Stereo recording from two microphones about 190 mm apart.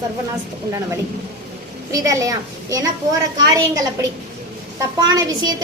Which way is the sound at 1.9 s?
15° right (ahead or behind).